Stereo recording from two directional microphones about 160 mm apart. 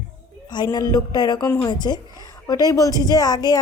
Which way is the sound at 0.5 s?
25° left (ahead or behind).